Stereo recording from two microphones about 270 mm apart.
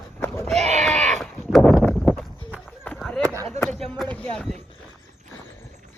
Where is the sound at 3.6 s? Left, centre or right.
Centre.